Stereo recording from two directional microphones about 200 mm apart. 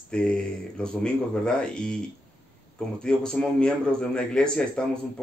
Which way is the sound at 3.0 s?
5° left (ahead or behind).